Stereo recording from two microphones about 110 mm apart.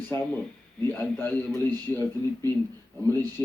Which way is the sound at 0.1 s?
25° left (ahead or behind).